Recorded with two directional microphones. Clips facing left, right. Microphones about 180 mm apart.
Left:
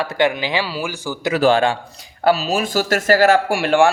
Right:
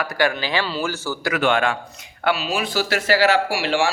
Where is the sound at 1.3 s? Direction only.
35° left (ahead or behind).